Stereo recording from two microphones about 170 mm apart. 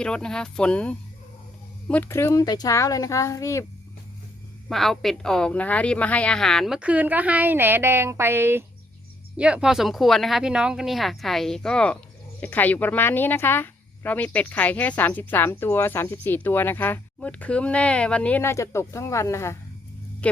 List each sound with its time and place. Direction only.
0.0 s a woman's voice: 5° left (ahead or behind)
4.7 s a woman's voice: centre (ahead or behind)